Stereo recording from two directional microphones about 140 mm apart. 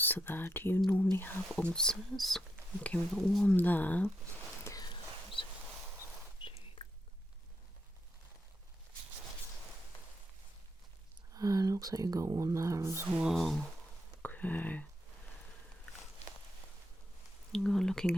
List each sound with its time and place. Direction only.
0.0 s speech: 15° left (ahead or behind)
4.6 s a sound: 25° left (ahead or behind)
6.4 s chewing: 35° left (ahead or behind)
11.3 s speech: 25° right (ahead or behind)
13.2 s speech: centre (ahead or behind)
14.2 s speech: 10° left (ahead or behind)
17.5 s speech: 5° left (ahead or behind)